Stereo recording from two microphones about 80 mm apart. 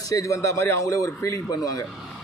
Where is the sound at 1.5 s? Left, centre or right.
Left.